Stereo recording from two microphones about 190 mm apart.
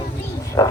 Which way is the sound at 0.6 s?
20° left (ahead or behind).